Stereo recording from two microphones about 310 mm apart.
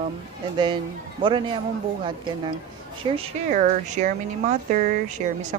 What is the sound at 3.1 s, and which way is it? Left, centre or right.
Speech, right.